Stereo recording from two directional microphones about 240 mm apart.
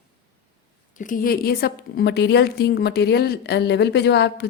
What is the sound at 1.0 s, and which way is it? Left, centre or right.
A woman's voice, left.